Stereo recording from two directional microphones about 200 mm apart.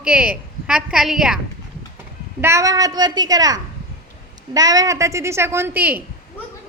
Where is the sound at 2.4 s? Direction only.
15° right (ahead or behind).